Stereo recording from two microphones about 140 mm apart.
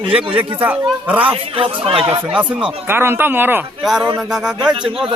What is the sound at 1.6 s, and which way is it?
Speech, 40° right (ahead or behind).